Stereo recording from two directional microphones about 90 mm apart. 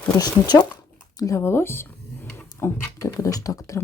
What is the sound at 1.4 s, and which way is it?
Speech, 25° left (ahead or behind).